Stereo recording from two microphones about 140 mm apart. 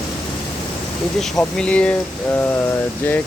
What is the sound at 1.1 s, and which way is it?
Speech, centre (ahead or behind).